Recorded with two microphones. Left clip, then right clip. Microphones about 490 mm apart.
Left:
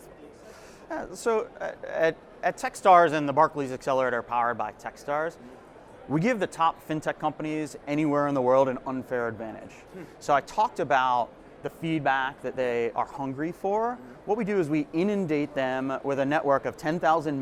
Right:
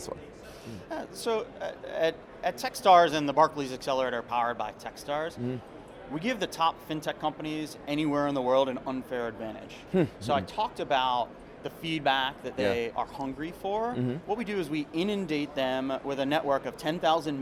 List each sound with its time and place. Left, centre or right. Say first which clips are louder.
0.9 s speech: left 4 dB; left
10.2 s speech: left 5 dB; left